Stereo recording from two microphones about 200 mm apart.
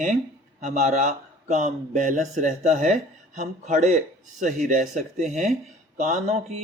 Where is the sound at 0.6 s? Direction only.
35° right (ahead or behind).